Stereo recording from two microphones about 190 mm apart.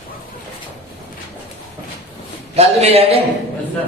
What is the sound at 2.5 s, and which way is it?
Speech, 35° right (ahead or behind).